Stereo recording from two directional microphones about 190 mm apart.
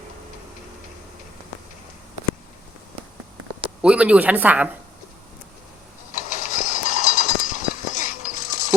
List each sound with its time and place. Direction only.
3.8 s speech: 5° right (ahead or behind)
6.1 s mechanisms: 45° left (ahead or behind)